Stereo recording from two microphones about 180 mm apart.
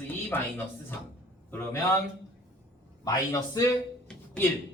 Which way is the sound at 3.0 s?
20° left (ahead or behind).